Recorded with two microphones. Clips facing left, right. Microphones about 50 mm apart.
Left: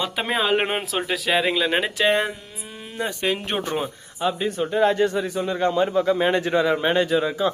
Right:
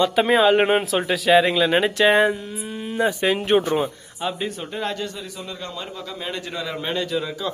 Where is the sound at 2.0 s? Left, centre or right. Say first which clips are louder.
Right 4 dB; centre.